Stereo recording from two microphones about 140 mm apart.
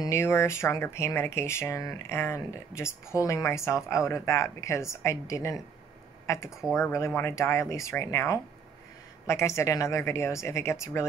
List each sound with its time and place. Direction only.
0.0 s speech: 20° left (ahead or behind)